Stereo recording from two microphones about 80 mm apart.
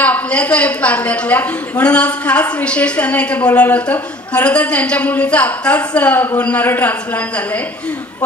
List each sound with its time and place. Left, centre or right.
0.0 s a woman's voice: centre